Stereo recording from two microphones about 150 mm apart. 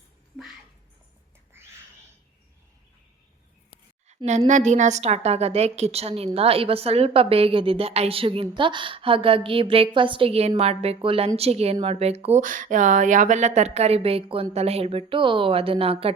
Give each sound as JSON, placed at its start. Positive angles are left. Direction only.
{"t": 4.3, "sound": "a woman's voice", "side_deg": -50}
{"t": 12.4, "sound": "a woman's voice", "side_deg": -60}